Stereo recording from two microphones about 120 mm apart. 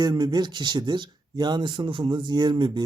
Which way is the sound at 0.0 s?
35° right (ahead or behind).